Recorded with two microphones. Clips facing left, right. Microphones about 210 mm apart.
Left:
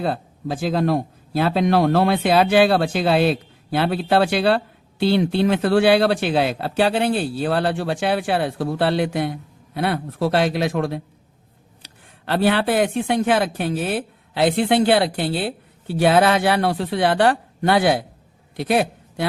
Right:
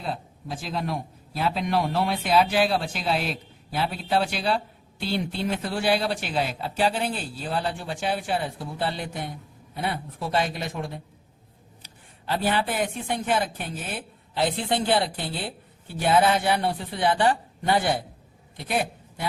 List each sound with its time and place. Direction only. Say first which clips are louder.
0.0 s speech: left 9 dB; 70° left (ahead or behind); by 11.0 s 90° left
11.8 s a man's voice: left 3 dB; 75° left (ahead or behind)